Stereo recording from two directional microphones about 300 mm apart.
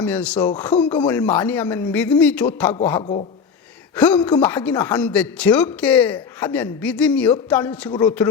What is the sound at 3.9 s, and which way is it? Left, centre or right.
Speech, centre.